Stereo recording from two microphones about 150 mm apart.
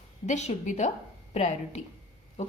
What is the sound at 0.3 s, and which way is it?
A woman's voice, 50° left (ahead or behind).